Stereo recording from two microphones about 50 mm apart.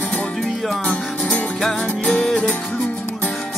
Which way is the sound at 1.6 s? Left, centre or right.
Centre.